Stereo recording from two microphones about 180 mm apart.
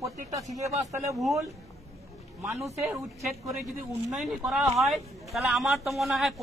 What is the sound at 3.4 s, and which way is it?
Speech, centre (ahead or behind).